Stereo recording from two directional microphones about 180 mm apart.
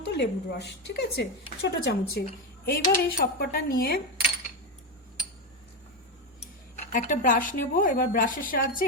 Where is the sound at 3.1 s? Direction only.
55° left (ahead or behind).